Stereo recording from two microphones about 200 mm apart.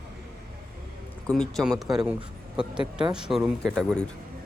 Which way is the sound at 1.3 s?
Centre (ahead or behind).